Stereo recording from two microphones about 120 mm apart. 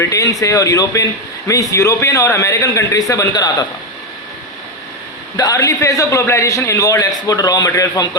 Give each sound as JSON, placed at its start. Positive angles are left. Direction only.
{"t": 0.0, "sound": "a man's voice", "side_deg": 25}
{"t": 5.4, "sound": "a man's voice", "side_deg": 30}